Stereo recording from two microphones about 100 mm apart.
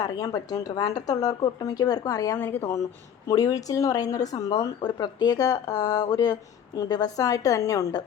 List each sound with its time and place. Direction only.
0.0 s a woman's voice: 35° left (ahead or behind)